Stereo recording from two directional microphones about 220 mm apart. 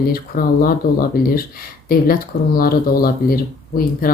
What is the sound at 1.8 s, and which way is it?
A woman's voice, 40° left (ahead or behind).